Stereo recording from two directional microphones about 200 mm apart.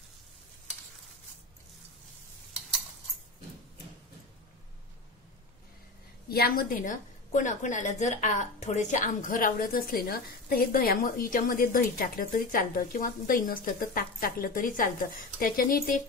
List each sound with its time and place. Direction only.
6.3 s a woman's voice: 50° left (ahead or behind)